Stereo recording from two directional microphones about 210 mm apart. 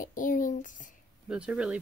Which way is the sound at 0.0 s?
40° left (ahead or behind).